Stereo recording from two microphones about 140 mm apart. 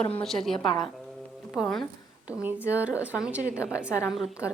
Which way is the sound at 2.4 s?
10° right (ahead or behind).